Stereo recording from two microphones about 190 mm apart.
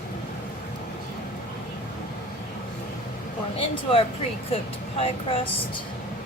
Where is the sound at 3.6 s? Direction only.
30° left (ahead or behind).